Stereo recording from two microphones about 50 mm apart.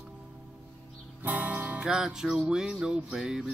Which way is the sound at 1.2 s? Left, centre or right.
Right.